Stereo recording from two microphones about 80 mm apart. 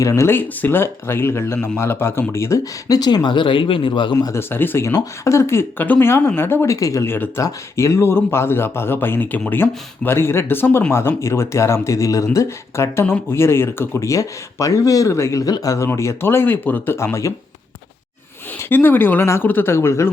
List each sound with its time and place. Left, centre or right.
0.1 s a man's voice: left
2.9 s speech: left
4.1 s speech: left
4.4 s a man's voice: left
6.7 s speech: left
7.1 s a man's voice: left
14.1 s speech: left
15.9 s speech: left
18.7 s a man's voice: left